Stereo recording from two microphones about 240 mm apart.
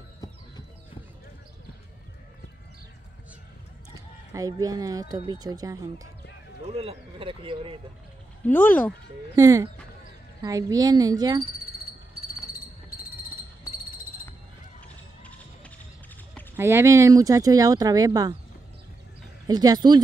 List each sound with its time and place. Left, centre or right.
4.3 s speech: centre
8.5 s speech: centre
9.3 s speech: centre
15.2 s music: centre
16.5 s speech: centre
19.4 s speech: centre